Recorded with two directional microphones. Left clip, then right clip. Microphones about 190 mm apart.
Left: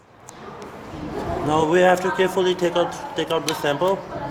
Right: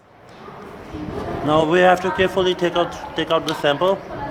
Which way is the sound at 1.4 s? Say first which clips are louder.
Right 2 dB; 15° right (ahead or behind).